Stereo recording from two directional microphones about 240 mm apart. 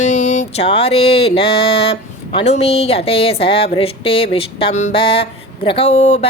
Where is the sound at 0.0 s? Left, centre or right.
Left.